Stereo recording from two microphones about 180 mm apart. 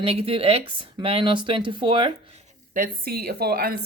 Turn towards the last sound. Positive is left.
turn(degrees=-55)  # may be behind; listen again after turning